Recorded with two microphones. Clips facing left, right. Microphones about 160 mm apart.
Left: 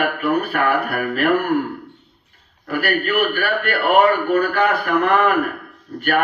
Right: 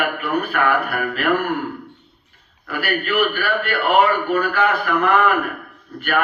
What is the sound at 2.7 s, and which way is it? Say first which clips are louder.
A man's voice: left 2 dB; 45° left (ahead or behind).